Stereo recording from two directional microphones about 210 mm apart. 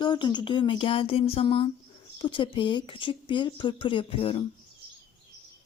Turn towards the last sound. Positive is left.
turn(degrees=25)  # may be behind; listen again after turning